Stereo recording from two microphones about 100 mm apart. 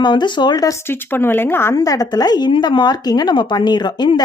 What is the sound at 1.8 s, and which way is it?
Speech, 40° left (ahead or behind).